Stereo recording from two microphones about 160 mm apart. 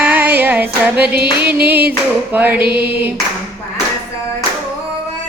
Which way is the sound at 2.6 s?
75° right (ahead or behind).